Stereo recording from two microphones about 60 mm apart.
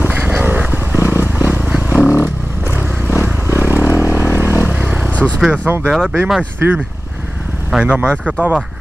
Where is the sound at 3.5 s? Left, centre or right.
Right.